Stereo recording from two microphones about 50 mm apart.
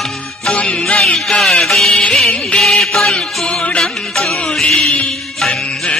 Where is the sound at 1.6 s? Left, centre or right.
Centre.